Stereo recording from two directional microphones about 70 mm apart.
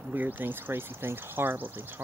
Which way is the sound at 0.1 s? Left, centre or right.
Right.